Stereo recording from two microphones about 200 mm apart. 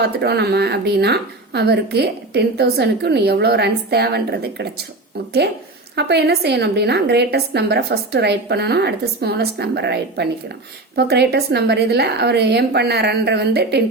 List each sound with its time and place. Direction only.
0.0 s a woman's voice: 55° right (ahead or behind)
6.0 s a woman's voice: 55° right (ahead or behind)